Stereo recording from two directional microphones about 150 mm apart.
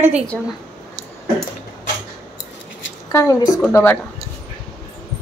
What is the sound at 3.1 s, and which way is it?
Speech, 20° left (ahead or behind).